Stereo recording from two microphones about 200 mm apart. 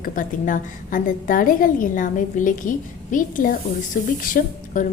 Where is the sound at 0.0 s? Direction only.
40° left (ahead or behind).